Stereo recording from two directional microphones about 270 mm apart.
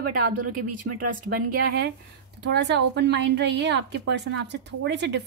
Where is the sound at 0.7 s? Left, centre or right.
Right.